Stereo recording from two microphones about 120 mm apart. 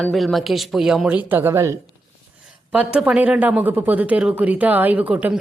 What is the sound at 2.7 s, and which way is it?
Speech, 5° right (ahead or behind).